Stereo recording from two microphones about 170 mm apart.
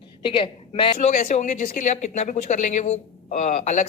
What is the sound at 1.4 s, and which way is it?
Speech, 50° left (ahead or behind).